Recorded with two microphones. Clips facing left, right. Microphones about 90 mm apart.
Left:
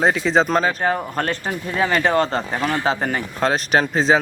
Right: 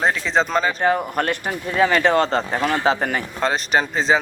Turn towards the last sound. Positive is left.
turn(degrees=0)  # may be behind; listen again after turning